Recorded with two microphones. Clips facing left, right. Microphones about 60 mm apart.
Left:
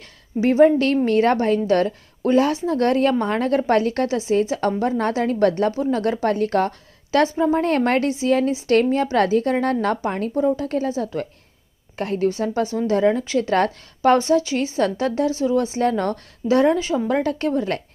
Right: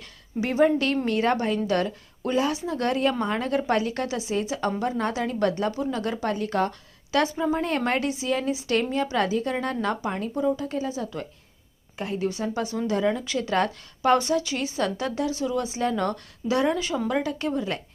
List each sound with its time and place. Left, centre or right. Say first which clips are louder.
0.3 s a woman's voice: left 7 dB; left
11.9 s a woman's voice: left 6 dB; left
17.2 s a woman's voice: left 6 dB; left